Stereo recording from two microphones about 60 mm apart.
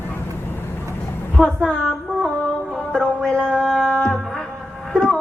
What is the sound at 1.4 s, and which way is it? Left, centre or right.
Speech, centre.